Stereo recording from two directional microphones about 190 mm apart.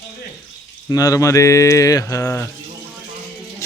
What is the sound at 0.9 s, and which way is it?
Speech, 20° left (ahead or behind).